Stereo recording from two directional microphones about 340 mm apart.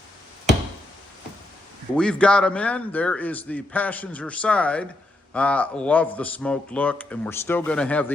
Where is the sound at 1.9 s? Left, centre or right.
Centre.